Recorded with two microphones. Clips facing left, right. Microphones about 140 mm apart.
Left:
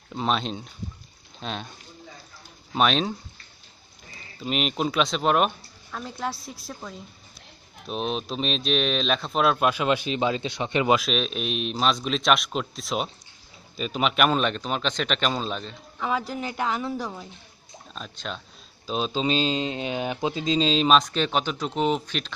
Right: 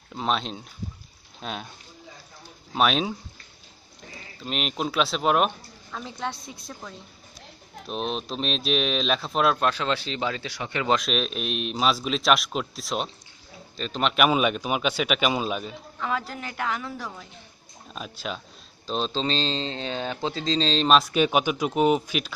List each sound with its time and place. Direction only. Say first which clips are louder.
0.1 s speech: left 1 dB; centre (ahead or behind)
2.7 s speech: even; 5° right (ahead or behind)
4.4 s speech: left 3 dB; centre (ahead or behind)
9.7 s speech: left 3 dB; 15° left (ahead or behind)
10.9 s a man's voice: right 2 dB; centre (ahead or behind)
16.0 s speech: left 3 dB; 15° left (ahead or behind)
17.9 s a man's voice: right 2 dB; 5° right (ahead or behind)
18.9 s speech: left 1 dB; 5° left (ahead or behind)
21.0 s a man's voice: right 3 dB; 10° right (ahead or behind)